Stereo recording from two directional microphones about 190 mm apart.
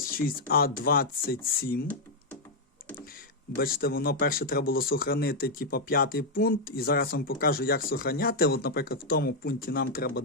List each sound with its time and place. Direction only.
0.5 s speech: 50° left (ahead or behind)
3.6 s speech: 50° left (ahead or behind)